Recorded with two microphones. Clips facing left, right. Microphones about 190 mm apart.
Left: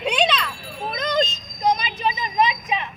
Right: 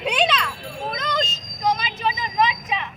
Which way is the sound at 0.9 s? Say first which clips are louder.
Left 6 dB; 15° left (ahead or behind).